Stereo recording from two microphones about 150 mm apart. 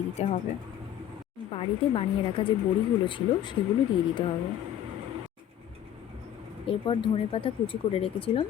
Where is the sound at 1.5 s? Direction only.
35° left (ahead or behind).